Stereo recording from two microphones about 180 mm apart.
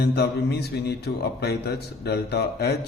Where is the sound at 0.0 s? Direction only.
65° left (ahead or behind).